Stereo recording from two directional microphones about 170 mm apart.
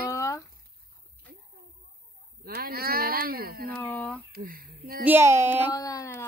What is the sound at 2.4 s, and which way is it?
Speech, 65° right (ahead or behind).